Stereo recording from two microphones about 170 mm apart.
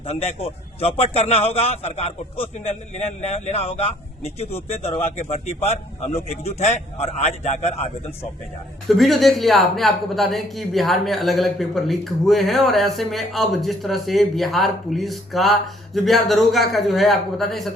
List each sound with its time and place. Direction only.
0.0 s a man's voice: 35° left (ahead or behind)
8.9 s a man's voice: centre (ahead or behind)